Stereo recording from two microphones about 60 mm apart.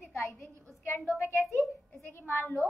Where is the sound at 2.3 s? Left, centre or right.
Left.